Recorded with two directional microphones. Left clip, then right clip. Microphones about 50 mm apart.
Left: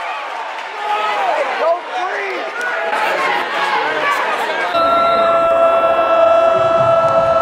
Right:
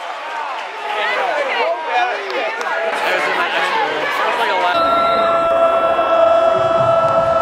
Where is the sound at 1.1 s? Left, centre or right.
Centre.